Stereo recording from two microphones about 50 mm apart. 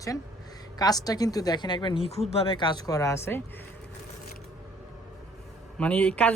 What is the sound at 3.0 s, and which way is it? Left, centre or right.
Speech, left.